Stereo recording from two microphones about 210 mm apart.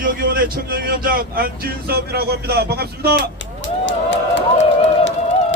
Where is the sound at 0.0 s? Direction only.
45° right (ahead or behind).